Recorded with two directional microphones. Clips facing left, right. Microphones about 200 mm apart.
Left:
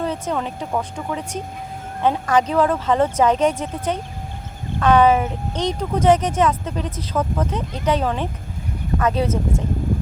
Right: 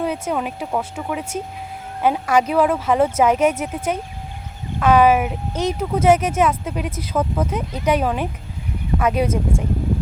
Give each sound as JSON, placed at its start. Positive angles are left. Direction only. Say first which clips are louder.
{"t": 0.0, "sound": "speech", "louder": "right 1 dB", "side_deg": -10}